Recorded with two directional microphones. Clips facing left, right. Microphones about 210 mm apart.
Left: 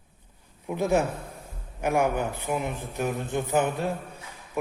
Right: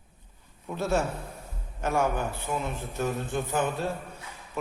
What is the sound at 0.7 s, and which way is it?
A man's voice, 15° left (ahead or behind).